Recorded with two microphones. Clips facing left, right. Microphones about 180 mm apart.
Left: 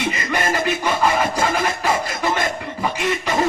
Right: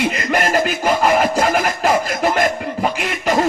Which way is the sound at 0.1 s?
55° right (ahead or behind).